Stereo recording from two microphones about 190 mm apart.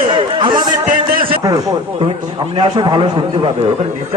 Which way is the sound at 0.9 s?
45° right (ahead or behind).